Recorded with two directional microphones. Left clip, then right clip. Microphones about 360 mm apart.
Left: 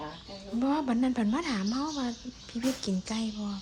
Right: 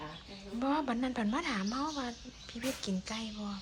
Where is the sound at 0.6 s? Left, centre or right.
Centre.